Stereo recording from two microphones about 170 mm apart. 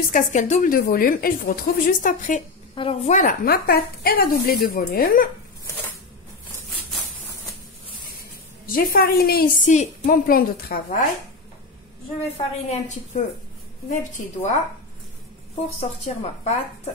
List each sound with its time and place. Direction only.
0.1 s a woman's voice: 45° left (ahead or behind)
2.7 s a woman's voice: 30° left (ahead or behind)
3.1 s a woman's voice: 50° left (ahead or behind)
8.7 s a woman's voice: 60° left (ahead or behind)
9.7 s a woman's voice: 45° left (ahead or behind)
12.4 s a woman's voice: 40° left (ahead or behind)
15.8 s a woman's voice: 40° left (ahead or behind)